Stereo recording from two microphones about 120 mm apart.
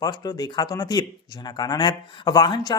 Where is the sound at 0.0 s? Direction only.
35° left (ahead or behind).